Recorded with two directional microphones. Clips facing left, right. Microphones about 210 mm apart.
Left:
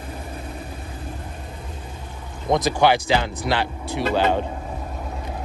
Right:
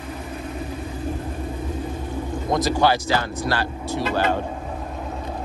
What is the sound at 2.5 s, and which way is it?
Speech, 20° left (ahead or behind).